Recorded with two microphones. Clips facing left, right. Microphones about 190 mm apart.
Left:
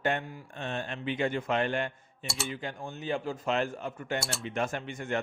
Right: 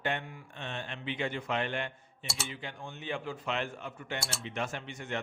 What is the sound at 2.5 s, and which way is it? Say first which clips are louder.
A man's voice: left 5 dB; 45° left (ahead or behind).